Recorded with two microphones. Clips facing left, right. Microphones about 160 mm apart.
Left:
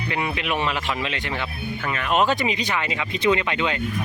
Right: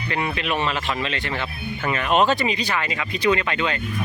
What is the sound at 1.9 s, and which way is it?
Speech, centre (ahead or behind).